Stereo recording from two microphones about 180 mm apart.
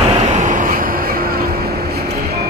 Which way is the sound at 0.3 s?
45° right (ahead or behind).